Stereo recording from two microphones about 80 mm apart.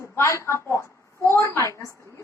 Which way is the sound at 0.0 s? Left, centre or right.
Left.